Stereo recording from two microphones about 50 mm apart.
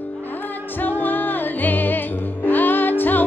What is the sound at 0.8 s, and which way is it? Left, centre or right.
Music, left.